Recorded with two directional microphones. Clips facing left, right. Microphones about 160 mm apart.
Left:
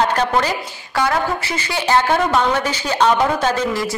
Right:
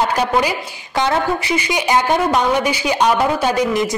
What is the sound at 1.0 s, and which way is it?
Speech, 15° right (ahead or behind).